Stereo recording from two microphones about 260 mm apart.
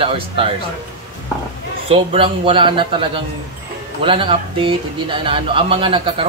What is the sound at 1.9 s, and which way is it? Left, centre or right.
Speech, right.